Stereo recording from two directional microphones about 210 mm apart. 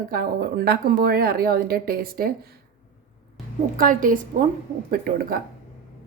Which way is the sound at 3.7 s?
40° right (ahead or behind).